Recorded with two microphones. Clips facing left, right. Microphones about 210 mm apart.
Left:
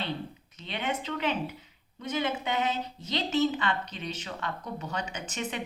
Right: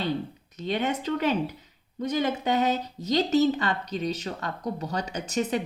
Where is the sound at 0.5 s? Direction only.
40° right (ahead or behind).